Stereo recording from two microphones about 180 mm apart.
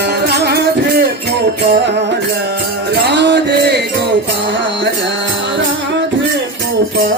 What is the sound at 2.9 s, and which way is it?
Music, 70° right (ahead or behind).